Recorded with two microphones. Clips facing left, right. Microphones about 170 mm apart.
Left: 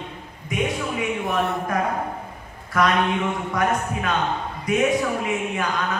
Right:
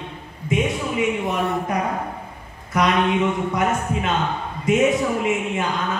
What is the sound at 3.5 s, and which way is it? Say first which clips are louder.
Speech: right 1 dB; 20° right (ahead or behind).